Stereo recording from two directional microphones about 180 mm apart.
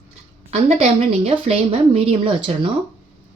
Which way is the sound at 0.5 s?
35° right (ahead or behind).